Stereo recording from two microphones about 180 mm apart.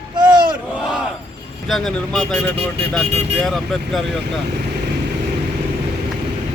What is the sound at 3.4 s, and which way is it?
Speech, centre (ahead or behind).